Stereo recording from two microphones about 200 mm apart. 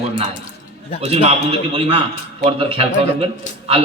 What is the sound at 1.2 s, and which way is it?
A man's voice, 30° right (ahead or behind).